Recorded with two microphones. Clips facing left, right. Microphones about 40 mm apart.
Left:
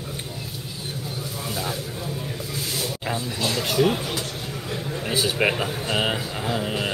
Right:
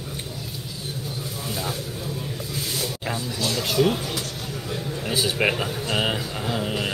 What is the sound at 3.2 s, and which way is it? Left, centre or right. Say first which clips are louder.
Speech: even; left.